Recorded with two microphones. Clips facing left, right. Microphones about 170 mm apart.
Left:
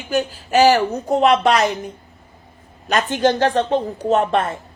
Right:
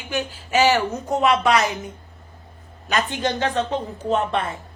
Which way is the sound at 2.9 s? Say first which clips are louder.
Left 6 dB; 45° left (ahead or behind).